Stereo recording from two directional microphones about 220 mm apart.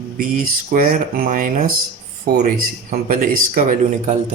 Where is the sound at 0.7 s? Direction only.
40° right (ahead or behind).